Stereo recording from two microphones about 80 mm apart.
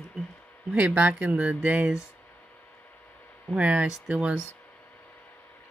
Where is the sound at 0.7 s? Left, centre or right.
Centre.